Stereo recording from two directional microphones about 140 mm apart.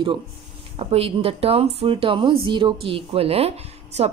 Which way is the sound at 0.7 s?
45° right (ahead or behind).